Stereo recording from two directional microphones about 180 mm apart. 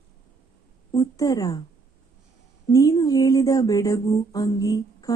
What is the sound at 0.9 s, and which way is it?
Speech, 20° left (ahead or behind).